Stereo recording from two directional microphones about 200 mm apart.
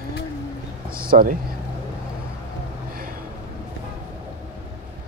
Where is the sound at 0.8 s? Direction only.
45° right (ahead or behind).